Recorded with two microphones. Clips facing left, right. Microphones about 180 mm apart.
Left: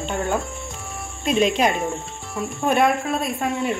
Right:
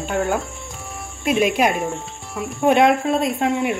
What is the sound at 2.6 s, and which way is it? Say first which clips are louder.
Speech: right 4 dB; 20° right (ahead or behind).